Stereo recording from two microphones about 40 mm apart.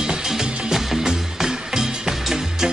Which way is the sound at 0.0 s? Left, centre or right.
Centre.